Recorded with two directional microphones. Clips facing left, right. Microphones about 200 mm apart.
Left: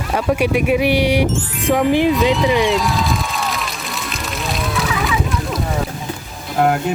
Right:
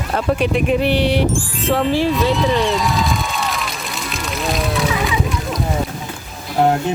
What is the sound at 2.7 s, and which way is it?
Crowd, centre (ahead or behind).